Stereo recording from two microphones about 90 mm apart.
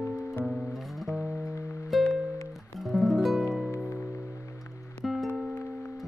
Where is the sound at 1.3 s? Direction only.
35° left (ahead or behind).